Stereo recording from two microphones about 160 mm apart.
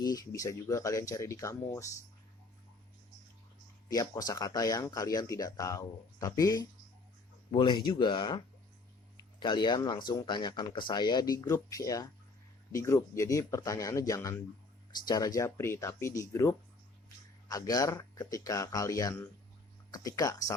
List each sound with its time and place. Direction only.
0.0 s speech: 25° left (ahead or behind)
3.8 s speech: 25° left (ahead or behind)